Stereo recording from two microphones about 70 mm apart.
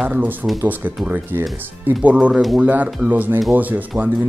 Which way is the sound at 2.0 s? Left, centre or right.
Centre.